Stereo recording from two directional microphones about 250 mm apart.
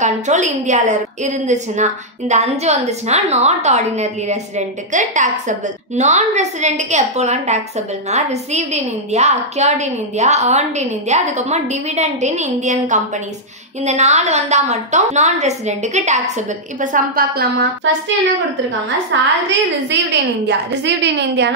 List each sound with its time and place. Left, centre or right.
0.0 s a woman's voice: right
19.1 s a woman's voice: right